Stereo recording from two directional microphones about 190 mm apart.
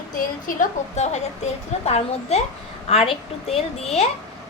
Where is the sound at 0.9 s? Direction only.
35° left (ahead or behind).